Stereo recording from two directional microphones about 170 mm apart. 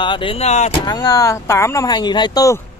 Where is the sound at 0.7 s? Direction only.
25° left (ahead or behind).